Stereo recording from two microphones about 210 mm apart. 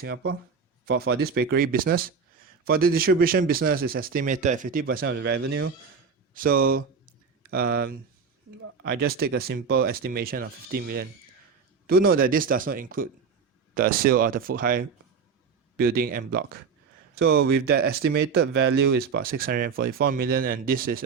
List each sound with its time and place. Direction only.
0.9 s speech: 50° right (ahead or behind)
6.3 s speech: 40° right (ahead or behind)